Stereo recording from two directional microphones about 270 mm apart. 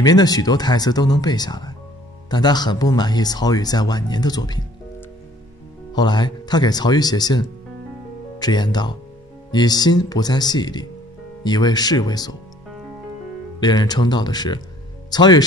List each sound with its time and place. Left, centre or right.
0.0 s speech: centre
5.9 s speech: centre
13.6 s speech: centre